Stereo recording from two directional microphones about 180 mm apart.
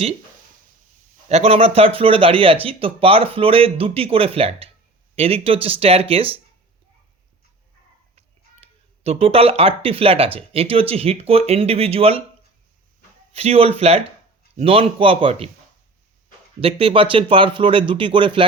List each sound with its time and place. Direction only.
1.3 s speech: 35° right (ahead or behind)
8.6 s speech: 35° right (ahead or behind)
13.3 s speech: 35° right (ahead or behind)
16.6 s speech: 30° right (ahead or behind)